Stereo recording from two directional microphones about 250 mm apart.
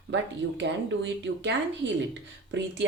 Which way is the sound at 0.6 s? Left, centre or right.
Right.